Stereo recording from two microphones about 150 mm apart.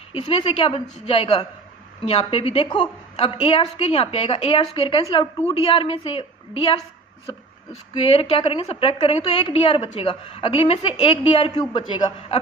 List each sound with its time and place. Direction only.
0.1 s a woman's voice: 40° left (ahead or behind)
8.0 s a woman's voice: 40° left (ahead or behind)
11.6 s a man's voice: 25° left (ahead or behind)